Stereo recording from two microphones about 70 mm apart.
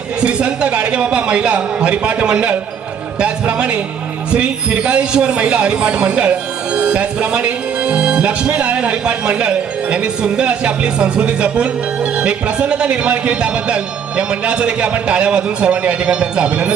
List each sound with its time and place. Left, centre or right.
0.2 s speech: centre